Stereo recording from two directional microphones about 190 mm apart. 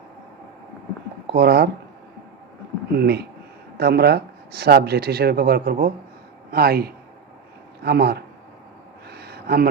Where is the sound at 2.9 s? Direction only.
60° right (ahead or behind).